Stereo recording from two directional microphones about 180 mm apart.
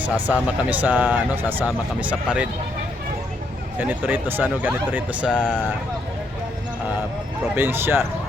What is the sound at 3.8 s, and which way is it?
Speech, 5° right (ahead or behind).